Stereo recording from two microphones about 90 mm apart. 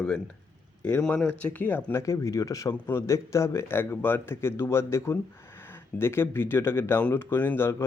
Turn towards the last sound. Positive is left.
turn(degrees=25)  # may be behind; listen again after turning